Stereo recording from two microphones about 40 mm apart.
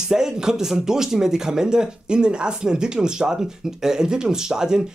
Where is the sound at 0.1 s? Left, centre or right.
Centre.